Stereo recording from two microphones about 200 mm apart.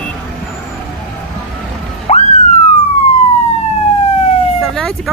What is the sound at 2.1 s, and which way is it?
Police car, 35° left (ahead or behind).